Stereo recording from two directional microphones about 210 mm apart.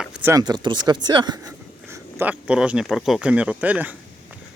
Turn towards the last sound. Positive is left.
turn(degrees=-5)  # may be behind; listen again after turning